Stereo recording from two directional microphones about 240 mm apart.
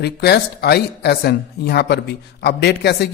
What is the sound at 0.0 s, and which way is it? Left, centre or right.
Speech, left.